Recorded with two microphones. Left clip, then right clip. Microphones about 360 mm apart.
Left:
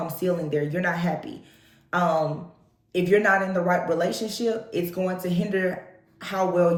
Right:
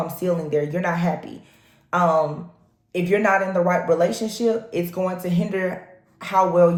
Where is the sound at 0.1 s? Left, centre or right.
Right.